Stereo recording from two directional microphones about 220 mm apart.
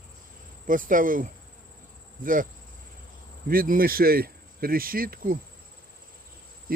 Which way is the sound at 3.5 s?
40° right (ahead or behind).